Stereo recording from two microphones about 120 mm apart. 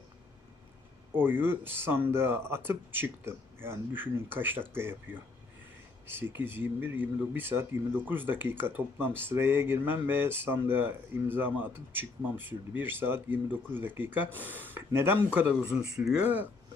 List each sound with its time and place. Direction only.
1.1 s speech: 15° right (ahead or behind)